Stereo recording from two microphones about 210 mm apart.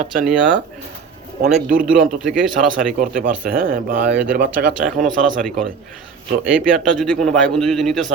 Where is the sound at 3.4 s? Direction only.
45° right (ahead or behind).